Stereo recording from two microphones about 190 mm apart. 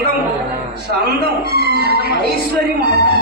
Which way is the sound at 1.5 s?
55° right (ahead or behind).